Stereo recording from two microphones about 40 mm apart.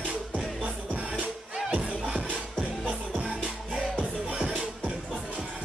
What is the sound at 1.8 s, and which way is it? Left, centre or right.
Music, right.